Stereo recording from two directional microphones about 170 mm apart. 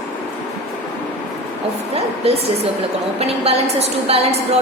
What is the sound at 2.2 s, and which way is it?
Speech, 35° right (ahead or behind).